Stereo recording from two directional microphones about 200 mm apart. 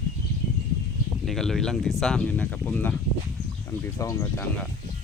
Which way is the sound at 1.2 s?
Centre (ahead or behind).